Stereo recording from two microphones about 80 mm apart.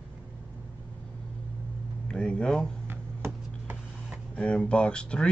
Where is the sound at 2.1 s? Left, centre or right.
Centre.